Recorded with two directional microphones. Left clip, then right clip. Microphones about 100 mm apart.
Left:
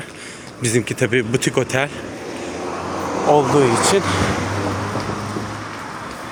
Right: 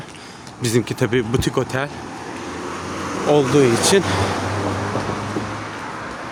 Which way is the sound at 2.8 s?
55° right (ahead or behind).